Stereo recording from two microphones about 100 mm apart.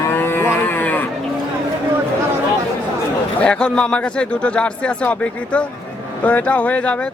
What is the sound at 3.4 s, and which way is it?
Speech, 10° left (ahead or behind).